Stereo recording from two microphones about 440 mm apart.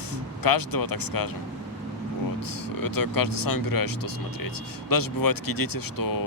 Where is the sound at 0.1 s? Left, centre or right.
Left.